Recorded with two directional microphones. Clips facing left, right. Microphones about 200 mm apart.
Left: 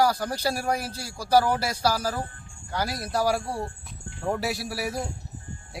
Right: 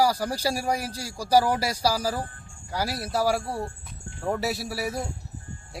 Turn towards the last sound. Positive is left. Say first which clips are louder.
# even
turn(degrees=0)  # may be behind; listen again after turning